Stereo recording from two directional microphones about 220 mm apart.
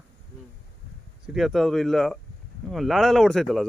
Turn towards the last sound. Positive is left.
turn(degrees=0)  # may be behind; listen again after turning